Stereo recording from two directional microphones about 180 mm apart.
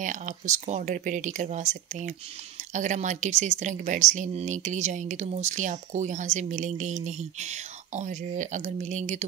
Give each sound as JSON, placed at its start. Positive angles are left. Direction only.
{"t": 0.0, "sound": "speech", "side_deg": -45}